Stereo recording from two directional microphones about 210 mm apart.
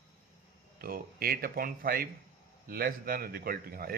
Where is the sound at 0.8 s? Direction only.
45° right (ahead or behind).